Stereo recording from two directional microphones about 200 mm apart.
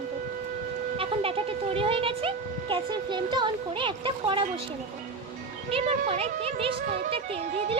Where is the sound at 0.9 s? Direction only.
30° right (ahead or behind).